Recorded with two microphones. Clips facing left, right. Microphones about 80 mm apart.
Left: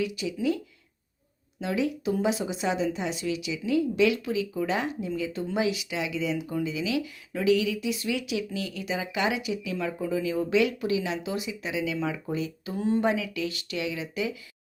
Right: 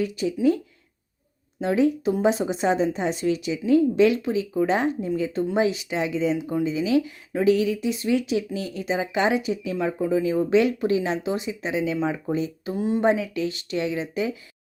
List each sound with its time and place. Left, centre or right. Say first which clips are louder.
0.0 s a woman's voice: right 4 dB; right
1.6 s a woman's voice: right 7 dB; right
12.7 s speech: right 2 dB; centre
13.0 s a woman's voice: right 5 dB; right